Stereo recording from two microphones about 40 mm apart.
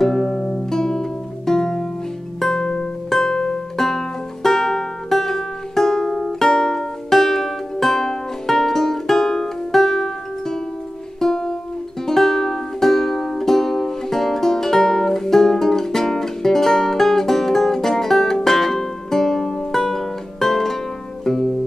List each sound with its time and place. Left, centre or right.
0.0 s music: centre
0.7 s music: centre